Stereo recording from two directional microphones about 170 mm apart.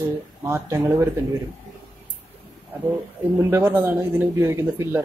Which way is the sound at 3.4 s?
15° right (ahead or behind).